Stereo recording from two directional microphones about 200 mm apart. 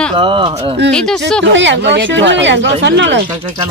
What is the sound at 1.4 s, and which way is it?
Speech, 65° right (ahead or behind).